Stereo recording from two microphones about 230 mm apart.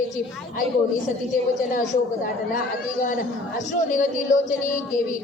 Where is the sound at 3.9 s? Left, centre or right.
Left.